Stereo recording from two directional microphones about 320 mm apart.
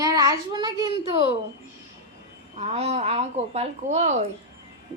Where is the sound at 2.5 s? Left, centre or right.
Centre.